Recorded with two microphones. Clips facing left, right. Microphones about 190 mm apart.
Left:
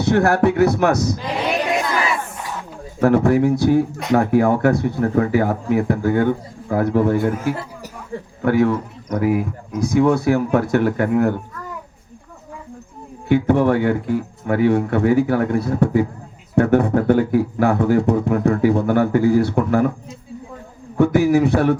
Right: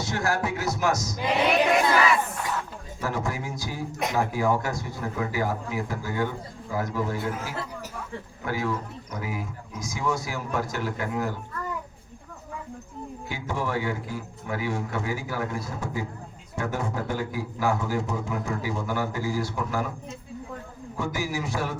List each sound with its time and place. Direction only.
0.0 s speech: 60° left (ahead or behind)
3.0 s a man's voice: 60° left (ahead or behind)
13.2 s speech: 60° left (ahead or behind)
21.0 s speech: 60° left (ahead or behind)